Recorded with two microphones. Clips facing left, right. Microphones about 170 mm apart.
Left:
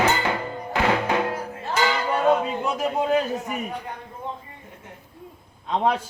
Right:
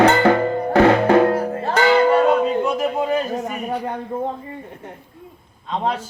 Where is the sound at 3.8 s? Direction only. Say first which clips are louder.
Right 10 dB; 60° right (ahead or behind).